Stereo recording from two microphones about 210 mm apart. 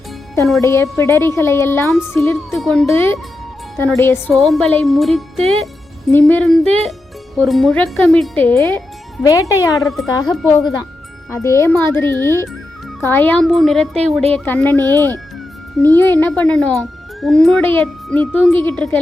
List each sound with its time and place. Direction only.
0.6 s speech: 15° left (ahead or behind)
2.6 s speech: centre (ahead or behind)
4.3 s speech: centre (ahead or behind); by 10.3 s 15° left (ahead or behind)
10.3 s speech: centre (ahead or behind)
11.3 s speech: 15° left (ahead or behind)
16.0 s speech: 10° left (ahead or behind)